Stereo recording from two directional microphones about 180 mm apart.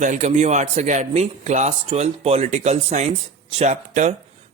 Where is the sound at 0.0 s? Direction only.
40° right (ahead or behind).